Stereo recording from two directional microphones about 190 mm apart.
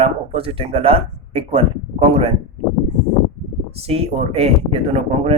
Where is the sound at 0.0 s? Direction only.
30° right (ahead or behind).